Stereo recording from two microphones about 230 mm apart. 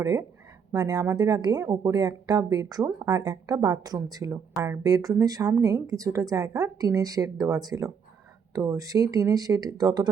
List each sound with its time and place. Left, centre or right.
0.0 s speech: centre